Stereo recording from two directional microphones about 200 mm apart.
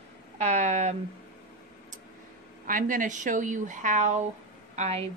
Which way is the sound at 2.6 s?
40° right (ahead or behind).